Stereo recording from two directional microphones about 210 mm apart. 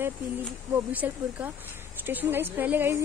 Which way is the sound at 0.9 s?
10° right (ahead or behind).